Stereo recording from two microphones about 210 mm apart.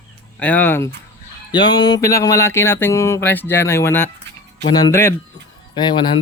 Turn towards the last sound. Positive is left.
turn(degrees=20)  # may be behind; listen again after turning